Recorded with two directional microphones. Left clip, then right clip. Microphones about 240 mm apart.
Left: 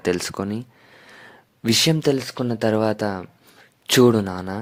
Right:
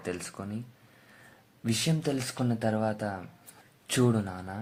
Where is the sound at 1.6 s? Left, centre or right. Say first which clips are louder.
Left 13 dB; left.